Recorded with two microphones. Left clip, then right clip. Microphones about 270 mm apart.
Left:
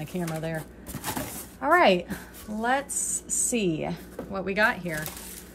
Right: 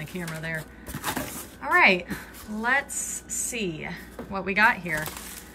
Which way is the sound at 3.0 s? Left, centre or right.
Right.